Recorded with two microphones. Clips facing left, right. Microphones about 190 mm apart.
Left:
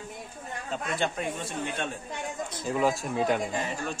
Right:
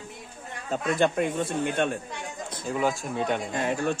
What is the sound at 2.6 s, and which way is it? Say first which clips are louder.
Speech: even; centre (ahead or behind).